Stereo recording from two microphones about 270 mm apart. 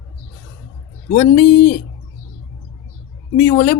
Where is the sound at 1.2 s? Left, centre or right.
Left.